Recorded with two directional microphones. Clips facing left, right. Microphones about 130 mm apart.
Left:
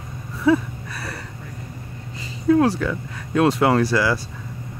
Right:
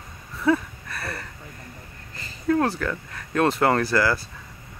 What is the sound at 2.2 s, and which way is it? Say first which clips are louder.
Speech: left 5 dB; centre (ahead or behind).